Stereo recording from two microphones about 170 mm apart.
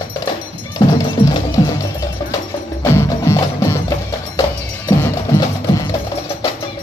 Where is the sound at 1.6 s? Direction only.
25° left (ahead or behind).